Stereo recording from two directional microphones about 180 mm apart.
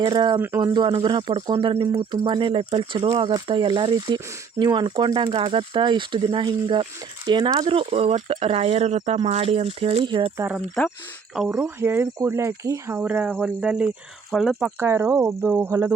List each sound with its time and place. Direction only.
0.0 s speech: 25° right (ahead or behind)
0.3 s speech: 10° right (ahead or behind)
0.6 s speech: 25° right (ahead or behind)
10.3 s speech: 10° right (ahead or behind)
14.8 s speech: 15° right (ahead or behind)